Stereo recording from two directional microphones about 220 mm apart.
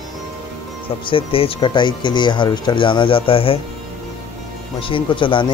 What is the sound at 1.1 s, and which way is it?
Speech, 25° left (ahead or behind).